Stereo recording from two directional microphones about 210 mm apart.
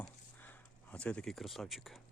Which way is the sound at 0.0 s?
10° left (ahead or behind).